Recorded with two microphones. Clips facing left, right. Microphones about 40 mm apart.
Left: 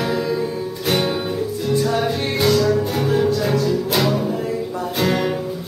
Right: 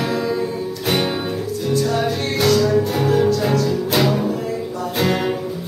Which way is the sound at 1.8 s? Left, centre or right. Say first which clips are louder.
Even; centre.